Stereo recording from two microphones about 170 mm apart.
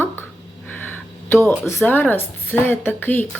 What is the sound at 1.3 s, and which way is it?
Speech, 15° left (ahead or behind).